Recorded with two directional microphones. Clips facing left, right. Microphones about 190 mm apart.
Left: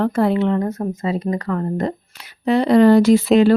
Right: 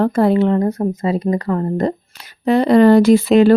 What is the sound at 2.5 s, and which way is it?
Speech, 45° right (ahead or behind).